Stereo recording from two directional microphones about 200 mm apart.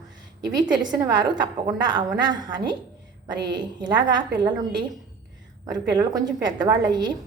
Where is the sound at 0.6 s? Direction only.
20° right (ahead or behind).